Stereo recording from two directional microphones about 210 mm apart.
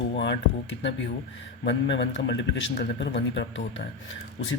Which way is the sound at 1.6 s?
55° left (ahead or behind).